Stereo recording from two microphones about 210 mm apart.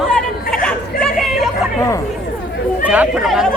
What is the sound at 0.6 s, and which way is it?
Chatter, 5° left (ahead or behind).